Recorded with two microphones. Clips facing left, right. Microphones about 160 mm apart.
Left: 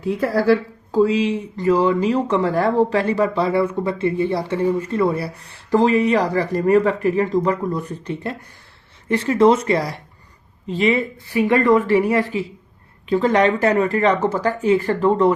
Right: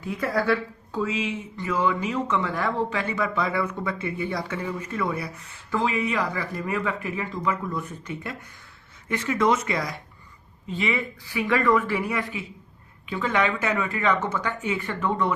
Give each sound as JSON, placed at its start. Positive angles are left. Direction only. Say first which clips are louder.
{"t": 0.2, "sound": "speech", "louder": "left 6 dB", "side_deg": 35}